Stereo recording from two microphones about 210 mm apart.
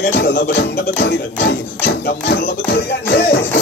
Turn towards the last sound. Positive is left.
turn(degrees=50)  # may be behind; listen again after turning